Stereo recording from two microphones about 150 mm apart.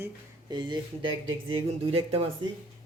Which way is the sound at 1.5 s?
40° right (ahead or behind).